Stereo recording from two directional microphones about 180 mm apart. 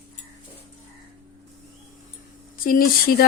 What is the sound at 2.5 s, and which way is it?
Speech, 55° left (ahead or behind).